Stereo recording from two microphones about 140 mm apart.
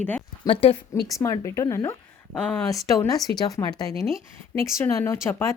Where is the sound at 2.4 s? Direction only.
10° left (ahead or behind).